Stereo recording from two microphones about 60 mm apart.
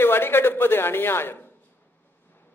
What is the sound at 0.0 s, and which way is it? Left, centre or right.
Speech, left.